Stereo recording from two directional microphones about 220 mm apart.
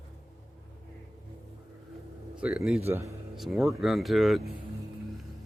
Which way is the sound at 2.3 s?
5° right (ahead or behind).